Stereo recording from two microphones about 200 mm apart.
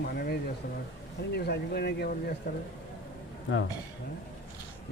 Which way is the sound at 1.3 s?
55° left (ahead or behind).